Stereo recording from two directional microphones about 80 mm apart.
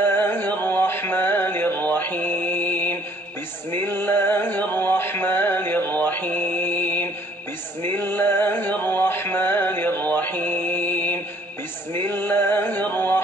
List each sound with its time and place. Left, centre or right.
0.0 s music: left